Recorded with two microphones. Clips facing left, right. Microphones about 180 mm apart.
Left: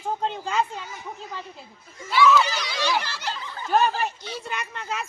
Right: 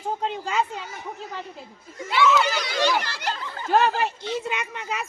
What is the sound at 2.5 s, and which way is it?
Speech, 50° right (ahead or behind).